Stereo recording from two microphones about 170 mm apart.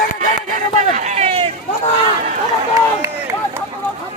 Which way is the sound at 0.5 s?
45° right (ahead or behind).